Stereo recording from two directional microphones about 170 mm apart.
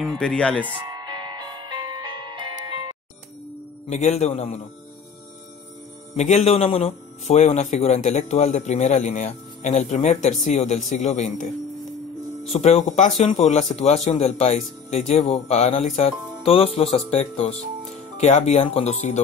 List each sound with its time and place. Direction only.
0.0 s speech: 5° left (ahead or behind)
0.8 s music: 25° right (ahead or behind)
3.9 s speech: 40° left (ahead or behind)
6.1 s speech: 45° left (ahead or behind)
12.5 s speech: 40° left (ahead or behind)